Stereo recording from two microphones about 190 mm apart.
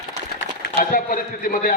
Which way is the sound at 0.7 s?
45° left (ahead or behind).